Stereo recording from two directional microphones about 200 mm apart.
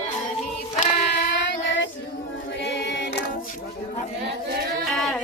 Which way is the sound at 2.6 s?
60° left (ahead or behind).